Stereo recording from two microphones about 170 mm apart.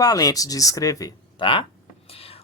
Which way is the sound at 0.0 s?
20° left (ahead or behind).